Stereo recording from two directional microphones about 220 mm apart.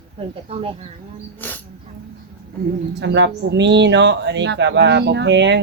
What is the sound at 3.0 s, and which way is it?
Speech, 55° right (ahead or behind).